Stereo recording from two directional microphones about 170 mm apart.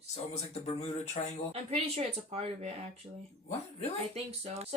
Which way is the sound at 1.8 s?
35° right (ahead or behind).